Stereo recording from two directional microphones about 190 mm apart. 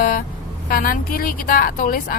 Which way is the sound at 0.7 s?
50° left (ahead or behind).